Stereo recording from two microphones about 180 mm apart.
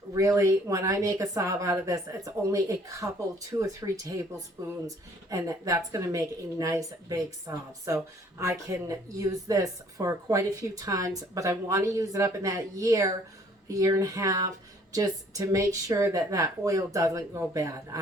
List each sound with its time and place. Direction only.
0.1 s speech: 20° right (ahead or behind)
5.3 s speech: 15° right (ahead or behind)